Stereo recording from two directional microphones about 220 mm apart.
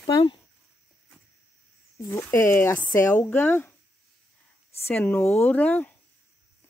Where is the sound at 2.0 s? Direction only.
10° left (ahead or behind).